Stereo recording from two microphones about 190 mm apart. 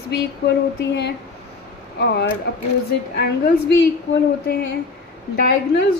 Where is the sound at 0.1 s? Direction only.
60° left (ahead or behind).